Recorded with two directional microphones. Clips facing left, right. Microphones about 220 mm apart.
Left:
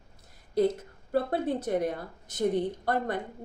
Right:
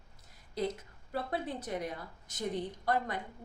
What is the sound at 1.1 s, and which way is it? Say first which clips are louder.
A woman's voice: left 9 dB; 55° left (ahead or behind).